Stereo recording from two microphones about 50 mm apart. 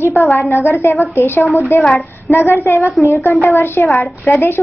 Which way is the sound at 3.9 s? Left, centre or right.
Left.